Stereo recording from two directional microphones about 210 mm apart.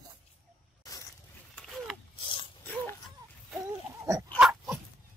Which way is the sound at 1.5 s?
Centre (ahead or behind).